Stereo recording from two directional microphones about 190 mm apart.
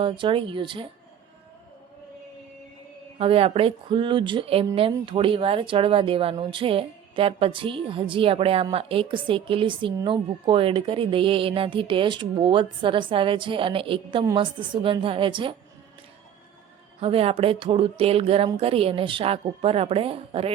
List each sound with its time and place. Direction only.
0.0 s a woman's voice: 25° right (ahead or behind)
3.2 s a woman's voice: 30° right (ahead or behind)
17.0 s a woman's voice: 30° right (ahead or behind)